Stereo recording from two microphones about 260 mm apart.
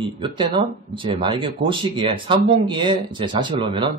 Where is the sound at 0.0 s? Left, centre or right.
Centre.